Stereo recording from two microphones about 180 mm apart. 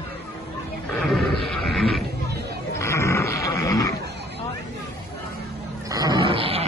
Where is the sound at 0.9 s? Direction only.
Centre (ahead or behind).